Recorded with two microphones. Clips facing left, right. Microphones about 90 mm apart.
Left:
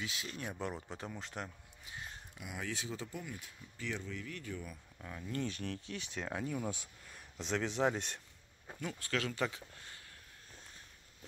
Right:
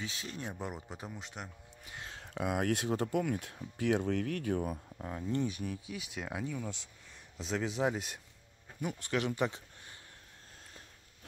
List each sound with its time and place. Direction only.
0.0 s speech: 35° right (ahead or behind); by 1.5 s 5° right (ahead or behind)
2.0 s speech: 90° right; by 4.6 s 65° right (ahead or behind)
4.9 s speech: 30° right (ahead or behind)
5.4 s speech: 10° right (ahead or behind)
6.5 s speech: 15° left (ahead or behind)
7.3 s speech: 5° right (ahead or behind)
8.8 s speech: 20° right (ahead or behind)